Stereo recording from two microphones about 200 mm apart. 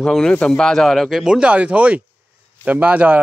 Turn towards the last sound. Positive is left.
turn(degrees=-5)  # may be behind; listen again after turning